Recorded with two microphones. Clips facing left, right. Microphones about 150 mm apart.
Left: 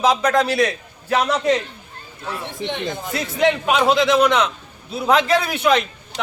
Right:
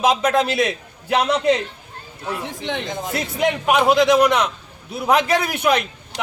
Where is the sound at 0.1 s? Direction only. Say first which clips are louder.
Even; 20° right (ahead or behind).